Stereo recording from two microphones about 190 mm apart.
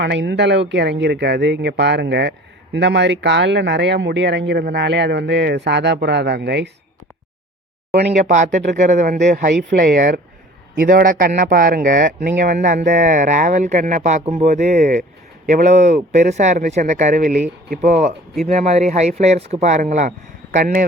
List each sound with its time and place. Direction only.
0.0 s speech: 65° right (ahead or behind)
8.2 s speech: 40° right (ahead or behind)